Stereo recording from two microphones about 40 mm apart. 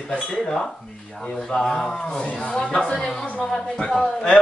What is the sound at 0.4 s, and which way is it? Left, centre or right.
A man's voice, centre.